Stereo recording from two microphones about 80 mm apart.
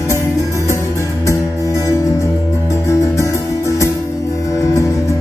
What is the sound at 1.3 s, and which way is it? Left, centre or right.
Music, left.